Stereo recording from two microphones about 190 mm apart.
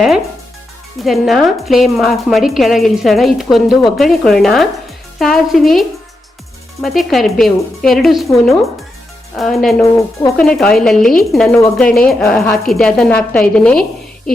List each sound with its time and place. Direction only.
1.0 s a woman's voice: centre (ahead or behind)
6.8 s a woman's voice: centre (ahead or behind)
9.3 s a woman's voice: centre (ahead or behind)
9.8 s speech: 15° left (ahead or behind)
10.4 s a woman's voice: 5° left (ahead or behind)